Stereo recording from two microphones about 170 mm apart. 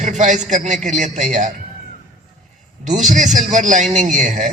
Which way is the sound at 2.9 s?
45° right (ahead or behind).